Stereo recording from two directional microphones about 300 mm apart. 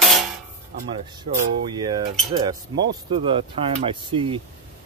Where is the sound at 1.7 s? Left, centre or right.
Centre.